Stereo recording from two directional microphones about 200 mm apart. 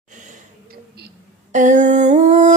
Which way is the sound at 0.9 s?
45° right (ahead or behind).